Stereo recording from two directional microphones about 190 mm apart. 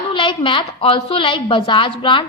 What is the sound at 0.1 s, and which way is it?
A woman's voice, 25° left (ahead or behind).